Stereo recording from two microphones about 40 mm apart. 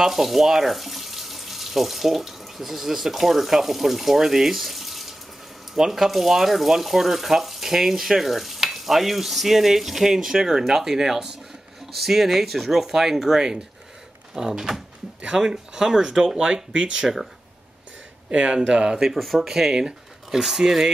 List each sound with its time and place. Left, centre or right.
0.0 s speech: centre
18.3 s speech: right
19.1 s speech: centre
19.4 s speech: centre